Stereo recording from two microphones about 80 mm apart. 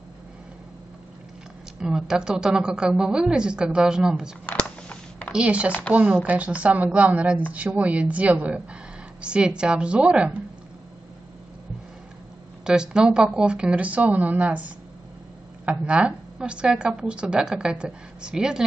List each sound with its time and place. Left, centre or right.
1.8 s a woman's voice: centre
4.5 s a sound: centre
5.3 s a woman's voice: centre
12.6 s a woman's voice: centre